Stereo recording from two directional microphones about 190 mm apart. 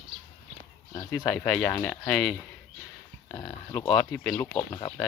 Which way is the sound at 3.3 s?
15° left (ahead or behind).